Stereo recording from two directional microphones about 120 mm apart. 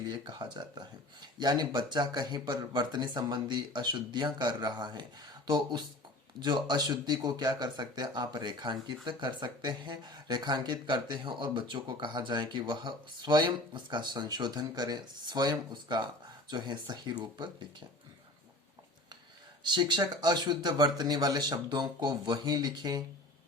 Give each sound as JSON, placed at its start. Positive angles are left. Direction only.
{"t": 0.1, "sound": "speech", "side_deg": -40}
{"t": 19.6, "sound": "speech", "side_deg": -40}